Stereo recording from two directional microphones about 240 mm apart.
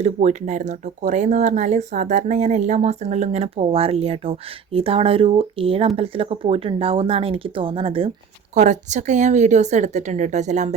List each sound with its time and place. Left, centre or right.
0.0 s speech: right